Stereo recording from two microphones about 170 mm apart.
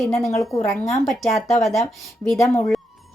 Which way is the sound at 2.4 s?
20° left (ahead or behind).